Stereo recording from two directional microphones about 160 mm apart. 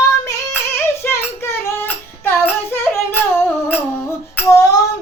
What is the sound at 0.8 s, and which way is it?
Child singing, 15° left (ahead or behind).